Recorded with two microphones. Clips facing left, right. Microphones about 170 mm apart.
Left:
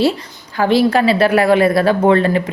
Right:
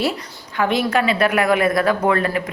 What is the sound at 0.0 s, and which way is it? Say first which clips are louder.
A woman's voice: left 6 dB; 30° left (ahead or behind).